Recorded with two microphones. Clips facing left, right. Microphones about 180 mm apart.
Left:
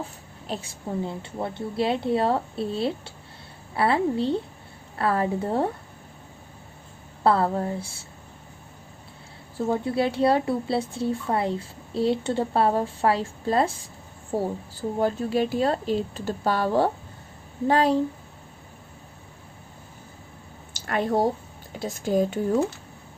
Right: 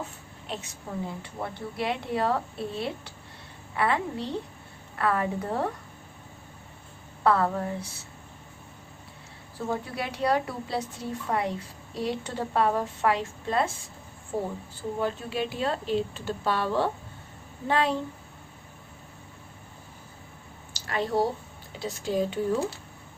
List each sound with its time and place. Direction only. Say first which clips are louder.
0.0 s speech: left 2 dB; 35° left (ahead or behind)
7.3 s speech: left 2 dB; 30° left (ahead or behind)
9.6 s speech: left 7 dB; 25° left (ahead or behind)
20.7 s speech: left 3 dB; 50° left (ahead or behind)